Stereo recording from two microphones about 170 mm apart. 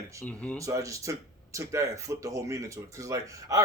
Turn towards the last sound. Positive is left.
turn(degrees=-20)  # may be behind; listen again after turning